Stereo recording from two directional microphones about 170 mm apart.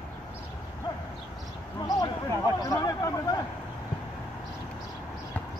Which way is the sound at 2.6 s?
20° left (ahead or behind).